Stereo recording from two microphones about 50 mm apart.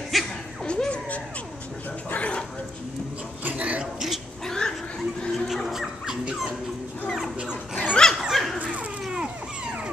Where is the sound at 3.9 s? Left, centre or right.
Centre.